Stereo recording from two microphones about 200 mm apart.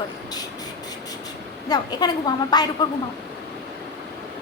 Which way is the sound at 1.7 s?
20° left (ahead or behind).